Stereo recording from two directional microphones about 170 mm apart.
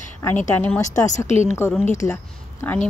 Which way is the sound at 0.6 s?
15° left (ahead or behind).